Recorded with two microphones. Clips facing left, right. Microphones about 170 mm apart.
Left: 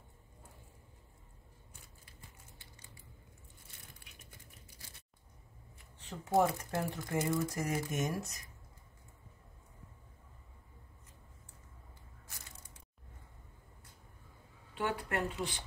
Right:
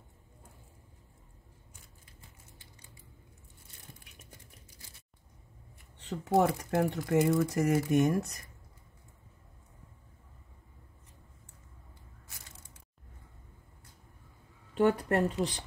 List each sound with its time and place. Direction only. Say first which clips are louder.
6.0 s speech: right 3 dB; 65° right (ahead or behind)
14.8 s speech: right 9 dB; 40° right (ahead or behind)